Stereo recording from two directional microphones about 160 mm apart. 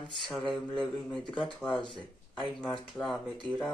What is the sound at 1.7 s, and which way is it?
Speech, 30° left (ahead or behind).